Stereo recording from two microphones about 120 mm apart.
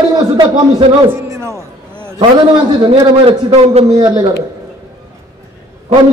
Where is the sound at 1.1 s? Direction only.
25° right (ahead or behind).